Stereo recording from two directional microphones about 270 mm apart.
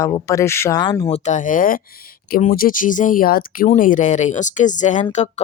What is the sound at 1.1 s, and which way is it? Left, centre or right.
A woman's voice, left.